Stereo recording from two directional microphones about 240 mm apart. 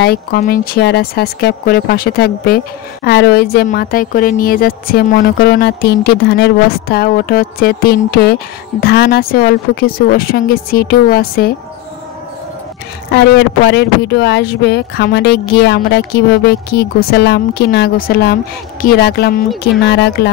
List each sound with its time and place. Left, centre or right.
0.0 s speech: left
13.1 s speech: left